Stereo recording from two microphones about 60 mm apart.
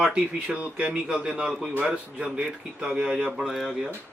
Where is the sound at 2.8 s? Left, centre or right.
Centre.